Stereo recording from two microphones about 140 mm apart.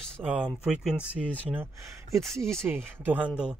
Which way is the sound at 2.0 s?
20° right (ahead or behind).